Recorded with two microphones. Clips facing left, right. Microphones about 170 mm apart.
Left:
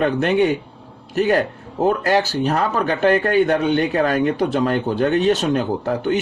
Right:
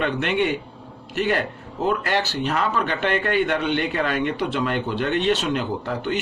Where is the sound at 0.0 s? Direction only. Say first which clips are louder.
Left 5 dB; 40° left (ahead or behind).